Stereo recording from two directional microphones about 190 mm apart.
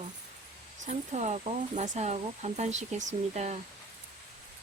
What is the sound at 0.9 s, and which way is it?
Speech, 35° right (ahead or behind).